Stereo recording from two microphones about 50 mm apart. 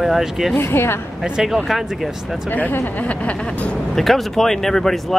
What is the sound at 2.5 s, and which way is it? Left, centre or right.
Speech, left.